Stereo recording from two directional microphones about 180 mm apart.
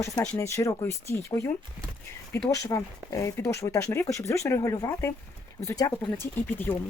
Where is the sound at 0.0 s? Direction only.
15° left (ahead or behind).